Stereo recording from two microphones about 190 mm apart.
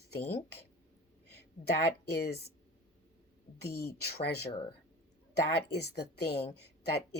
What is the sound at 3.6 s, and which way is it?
Speech, 55° left (ahead or behind).